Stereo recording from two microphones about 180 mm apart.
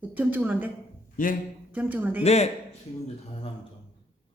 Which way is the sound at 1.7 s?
10° right (ahead or behind).